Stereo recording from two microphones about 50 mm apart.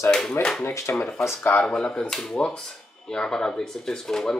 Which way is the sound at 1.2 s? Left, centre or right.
Left.